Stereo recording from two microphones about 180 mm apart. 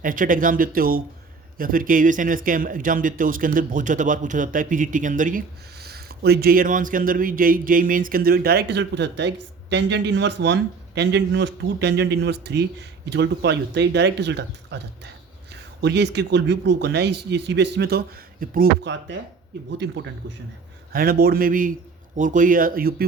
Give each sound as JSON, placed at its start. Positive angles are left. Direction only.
{"t": 0.0, "sound": "speech", "side_deg": -50}
{"t": 5.8, "sound": "speech", "side_deg": -60}
{"t": 15.8, "sound": "speech", "side_deg": -70}
{"t": 19.8, "sound": "speech", "side_deg": -80}
{"t": 20.9, "sound": "speech", "side_deg": -55}